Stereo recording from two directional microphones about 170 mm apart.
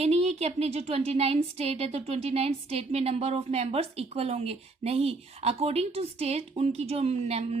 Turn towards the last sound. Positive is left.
turn(degrees=-40)  # may be behind; listen again after turning